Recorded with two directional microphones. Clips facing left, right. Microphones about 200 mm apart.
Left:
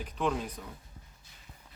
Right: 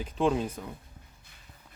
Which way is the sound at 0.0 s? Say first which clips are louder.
Right 5 dB; 25° right (ahead or behind).